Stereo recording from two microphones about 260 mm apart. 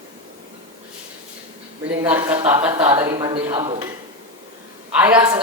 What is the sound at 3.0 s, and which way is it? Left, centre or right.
Speech, centre.